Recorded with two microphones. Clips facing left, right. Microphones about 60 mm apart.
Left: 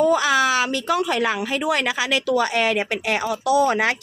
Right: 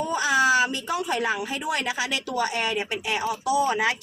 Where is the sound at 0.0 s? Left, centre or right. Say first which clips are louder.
Left 4 dB; left.